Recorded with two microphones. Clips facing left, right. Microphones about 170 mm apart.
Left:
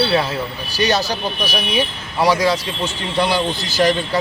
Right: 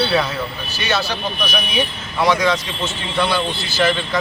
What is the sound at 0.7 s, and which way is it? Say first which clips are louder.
Speech: left 4 dB; 40° left (ahead or behind).